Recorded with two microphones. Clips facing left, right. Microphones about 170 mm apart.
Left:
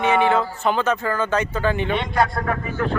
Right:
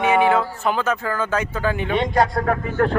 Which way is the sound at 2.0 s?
40° right (ahead or behind).